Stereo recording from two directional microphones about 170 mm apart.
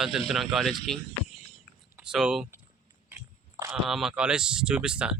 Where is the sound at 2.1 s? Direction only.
Centre (ahead or behind).